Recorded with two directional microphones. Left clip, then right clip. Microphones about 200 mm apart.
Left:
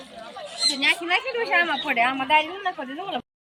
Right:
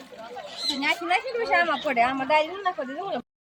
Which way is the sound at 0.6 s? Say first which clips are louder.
Left 4 dB; 55° right (ahead or behind).